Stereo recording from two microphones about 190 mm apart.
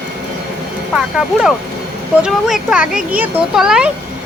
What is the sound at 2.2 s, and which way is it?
A woman's voice, centre (ahead or behind).